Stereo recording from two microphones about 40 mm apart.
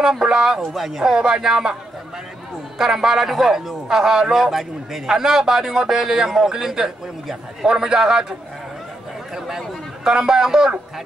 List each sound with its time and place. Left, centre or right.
0.0 s a man's voice: centre
2.8 s a man's voice: centre
10.0 s a man's voice: centre